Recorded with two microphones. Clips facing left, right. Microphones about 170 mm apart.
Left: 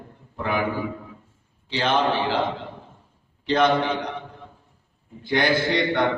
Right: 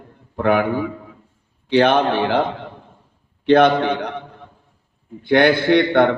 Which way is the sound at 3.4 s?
60° right (ahead or behind).